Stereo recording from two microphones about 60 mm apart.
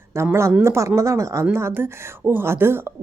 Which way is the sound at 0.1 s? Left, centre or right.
Right.